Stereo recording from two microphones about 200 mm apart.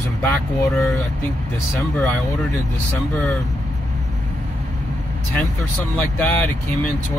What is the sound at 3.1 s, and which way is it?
Speech, centre (ahead or behind).